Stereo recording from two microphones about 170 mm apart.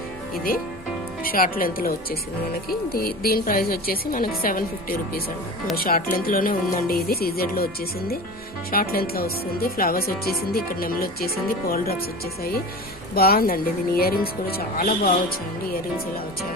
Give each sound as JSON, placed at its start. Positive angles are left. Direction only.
{"t": 1.2, "sound": "speech", "side_deg": 55}